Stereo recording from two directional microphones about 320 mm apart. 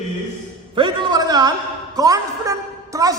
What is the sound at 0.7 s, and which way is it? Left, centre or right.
A man's voice, centre.